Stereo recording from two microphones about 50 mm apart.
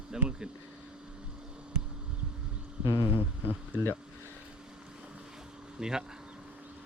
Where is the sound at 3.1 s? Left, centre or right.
Right.